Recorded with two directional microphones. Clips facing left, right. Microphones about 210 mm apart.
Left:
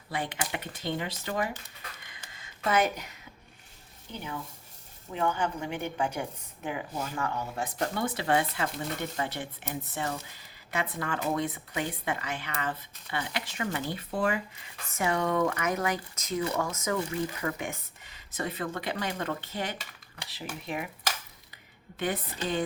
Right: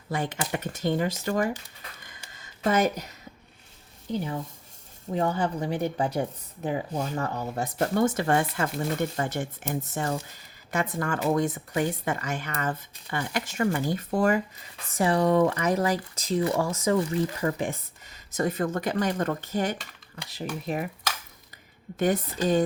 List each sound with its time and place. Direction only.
0.1 s a woman's voice: 45° right (ahead or behind)
2.3 s a sound: 40° right (ahead or behind)
4.1 s a woman's voice: 35° right (ahead or behind)
21.9 s a woman's voice: 45° right (ahead or behind)